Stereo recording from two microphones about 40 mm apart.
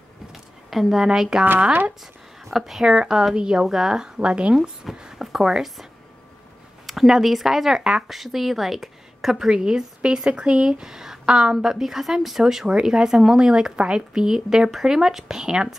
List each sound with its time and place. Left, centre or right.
0.3 s a sound: centre
1.0 s speech: centre
2.5 s speech: centre; by 4.6 s right
4.9 s a sound: centre
5.5 s speech: centre
6.9 s a woman's voice: centre
11.5 s speech: centre